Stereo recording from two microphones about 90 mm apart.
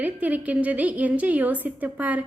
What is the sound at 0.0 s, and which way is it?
A woman's voice, 15° right (ahead or behind).